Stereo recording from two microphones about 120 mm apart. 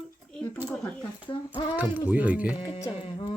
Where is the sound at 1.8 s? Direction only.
15° right (ahead or behind).